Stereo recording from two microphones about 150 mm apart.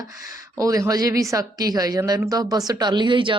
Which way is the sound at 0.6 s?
25° right (ahead or behind).